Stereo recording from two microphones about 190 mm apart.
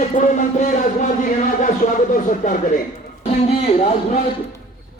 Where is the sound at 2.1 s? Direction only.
40° left (ahead or behind).